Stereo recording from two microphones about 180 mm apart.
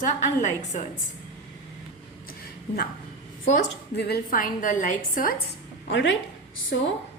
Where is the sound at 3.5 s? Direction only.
65° left (ahead or behind); by 5.3 s 45° left (ahead or behind).